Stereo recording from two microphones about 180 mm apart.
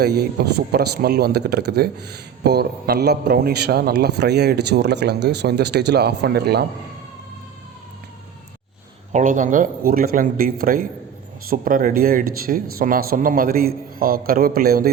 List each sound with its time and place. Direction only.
0.0 s a man's voice: 65° right (ahead or behind)
9.1 s speech: 45° right (ahead or behind)